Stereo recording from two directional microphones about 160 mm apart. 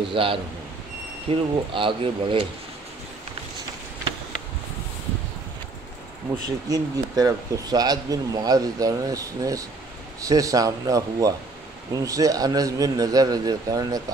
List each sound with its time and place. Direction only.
0.1 s speech: 35° right (ahead or behind)
6.3 s speech: 20° right (ahead or behind)